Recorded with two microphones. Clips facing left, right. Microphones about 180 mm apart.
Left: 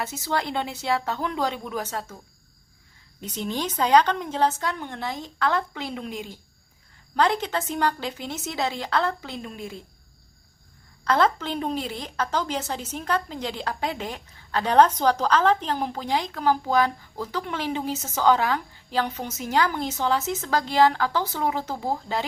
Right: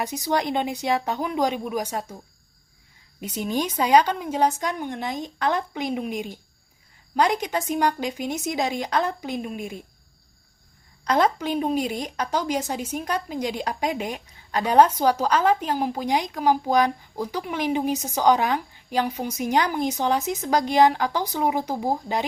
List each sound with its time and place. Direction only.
0.0 s a woman's voice: 15° right (ahead or behind)
3.2 s a woman's voice: 10° right (ahead or behind)
11.0 s a woman's voice: 15° right (ahead or behind)